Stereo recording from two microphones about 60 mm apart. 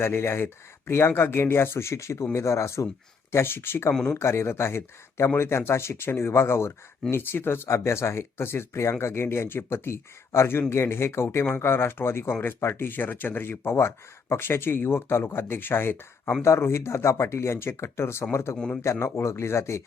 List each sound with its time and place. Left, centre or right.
0.0 s speech: left
3.3 s speech: left